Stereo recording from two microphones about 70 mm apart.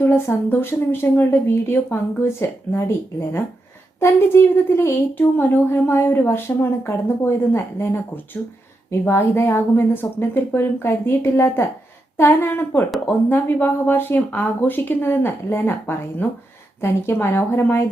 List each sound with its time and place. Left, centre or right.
0.0 s speech: left